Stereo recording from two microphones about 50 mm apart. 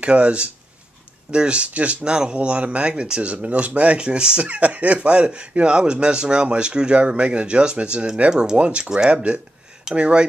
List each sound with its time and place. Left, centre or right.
0.0 s speech: right